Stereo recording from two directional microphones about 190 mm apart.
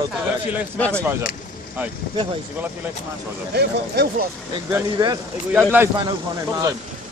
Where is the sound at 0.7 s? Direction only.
5° left (ahead or behind).